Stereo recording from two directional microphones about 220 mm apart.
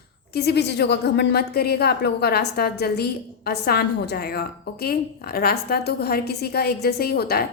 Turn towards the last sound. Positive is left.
turn(degrees=45)  # may be behind; listen again after turning